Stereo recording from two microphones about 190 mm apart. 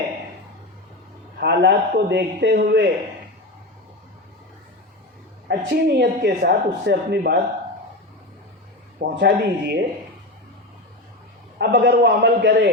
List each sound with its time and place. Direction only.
1.4 s speech: 60° right (ahead or behind)
5.5 s speech: 60° right (ahead or behind)
9.0 s speech: 60° right (ahead or behind)
11.5 s speech: 60° right (ahead or behind)